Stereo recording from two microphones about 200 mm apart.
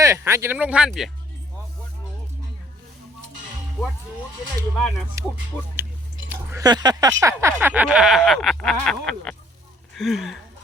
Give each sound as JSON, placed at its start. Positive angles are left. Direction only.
{"t": 0.0, "sound": "speech", "side_deg": -15}
{"t": 5.2, "sound": "speech", "side_deg": -15}